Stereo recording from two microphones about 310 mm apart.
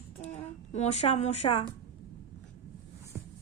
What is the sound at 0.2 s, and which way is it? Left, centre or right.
Speech, left.